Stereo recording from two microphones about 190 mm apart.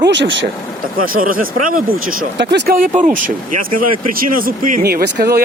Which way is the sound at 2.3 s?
65° right (ahead or behind).